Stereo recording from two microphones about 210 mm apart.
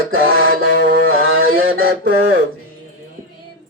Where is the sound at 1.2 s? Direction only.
75° right (ahead or behind).